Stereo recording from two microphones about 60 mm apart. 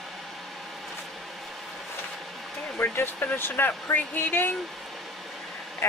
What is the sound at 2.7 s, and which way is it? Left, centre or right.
Speech, left.